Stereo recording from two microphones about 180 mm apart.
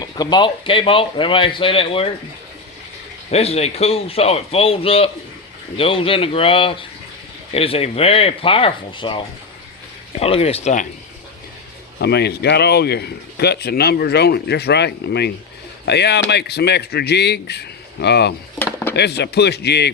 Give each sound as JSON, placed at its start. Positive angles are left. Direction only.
{"t": 0.0, "sound": "a man's voice", "side_deg": 25}
{"t": 3.2, "sound": "a man's voice", "side_deg": 35}
{"t": 11.9, "sound": "speech", "side_deg": 65}
{"t": 18.6, "sound": "a sound", "side_deg": 10}
{"t": 18.9, "sound": "speech", "side_deg": 70}